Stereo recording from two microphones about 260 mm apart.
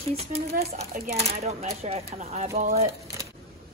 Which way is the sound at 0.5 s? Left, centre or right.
Right.